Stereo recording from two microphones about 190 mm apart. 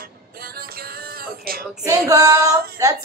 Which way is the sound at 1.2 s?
50° right (ahead or behind).